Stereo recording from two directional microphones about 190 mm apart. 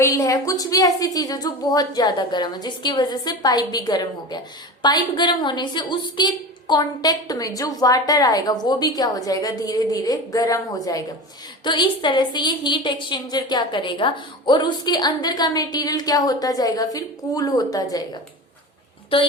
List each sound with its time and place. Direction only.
0.0 s a woman's voice: 20° left (ahead or behind)